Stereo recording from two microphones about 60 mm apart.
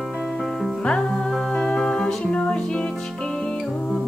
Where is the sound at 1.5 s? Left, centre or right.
Centre.